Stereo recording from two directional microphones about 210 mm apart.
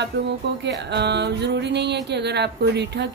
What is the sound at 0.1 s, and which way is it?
A woman's voice, 50° right (ahead or behind).